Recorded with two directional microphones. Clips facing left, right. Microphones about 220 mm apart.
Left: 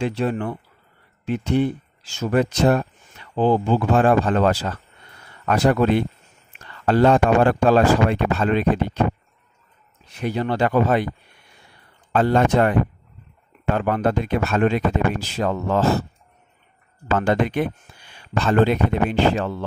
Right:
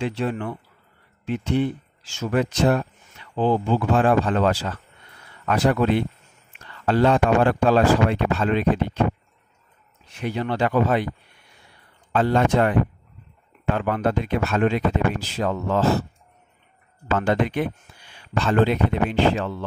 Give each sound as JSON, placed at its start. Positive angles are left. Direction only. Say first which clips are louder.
{"t": 0.0, "sound": "speech", "louder": "left 3 dB", "side_deg": 40}
{"t": 10.2, "sound": "speech", "louder": "left 2 dB", "side_deg": 40}
{"t": 12.1, "sound": "speech", "louder": "left 2 dB", "side_deg": 45}
{"t": 17.2, "sound": "speech", "louder": "left 2 dB", "side_deg": 45}